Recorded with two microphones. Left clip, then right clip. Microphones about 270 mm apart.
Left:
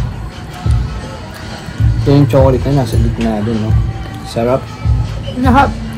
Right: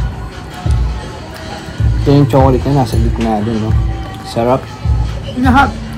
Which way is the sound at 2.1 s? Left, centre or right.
Centre.